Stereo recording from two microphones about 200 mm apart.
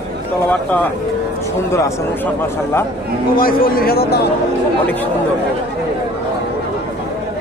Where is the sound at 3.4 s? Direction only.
45° left (ahead or behind).